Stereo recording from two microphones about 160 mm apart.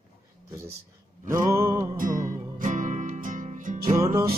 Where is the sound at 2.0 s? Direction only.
55° right (ahead or behind).